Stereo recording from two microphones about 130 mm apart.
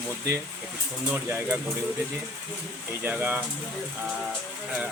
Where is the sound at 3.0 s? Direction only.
10° right (ahead or behind).